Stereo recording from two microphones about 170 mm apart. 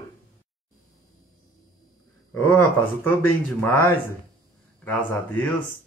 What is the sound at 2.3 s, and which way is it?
Speech, 10° left (ahead or behind).